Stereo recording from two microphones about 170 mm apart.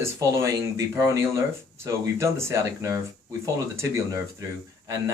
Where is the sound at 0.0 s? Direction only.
15° right (ahead or behind).